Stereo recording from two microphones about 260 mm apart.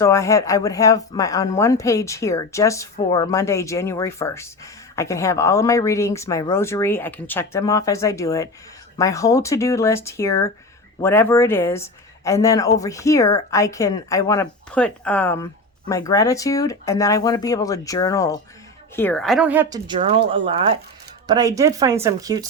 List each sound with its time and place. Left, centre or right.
0.0 s a woman's voice: centre
19.9 s speech: right